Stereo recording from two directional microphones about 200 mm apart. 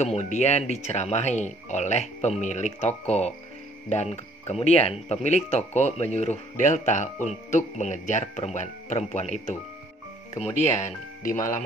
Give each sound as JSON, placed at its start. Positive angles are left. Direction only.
{"t": 0.0, "sound": "speech", "side_deg": 35}